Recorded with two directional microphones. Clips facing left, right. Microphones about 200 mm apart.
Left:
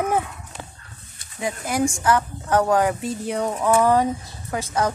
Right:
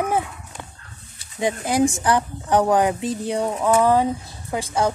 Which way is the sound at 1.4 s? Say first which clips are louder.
Right 4 dB; 20° right (ahead or behind).